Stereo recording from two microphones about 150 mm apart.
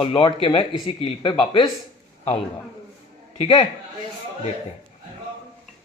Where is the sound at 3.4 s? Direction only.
35° left (ahead or behind).